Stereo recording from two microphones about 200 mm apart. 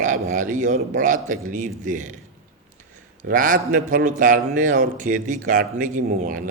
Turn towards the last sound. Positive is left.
turn(degrees=-40)  # may be behind; listen again after turning